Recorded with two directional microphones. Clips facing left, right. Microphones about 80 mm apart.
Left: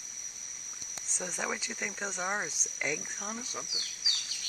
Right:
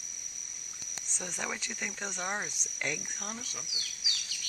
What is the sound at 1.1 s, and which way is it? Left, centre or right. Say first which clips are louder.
Speech: left 2 dB; centre.